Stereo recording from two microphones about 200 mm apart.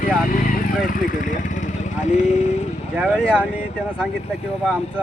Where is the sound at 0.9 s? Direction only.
40° left (ahead or behind).